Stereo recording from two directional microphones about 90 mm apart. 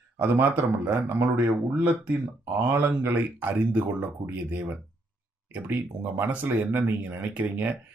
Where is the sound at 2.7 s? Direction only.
30° right (ahead or behind).